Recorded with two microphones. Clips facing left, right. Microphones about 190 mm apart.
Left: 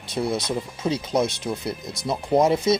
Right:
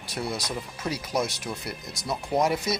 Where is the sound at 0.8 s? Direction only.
20° left (ahead or behind).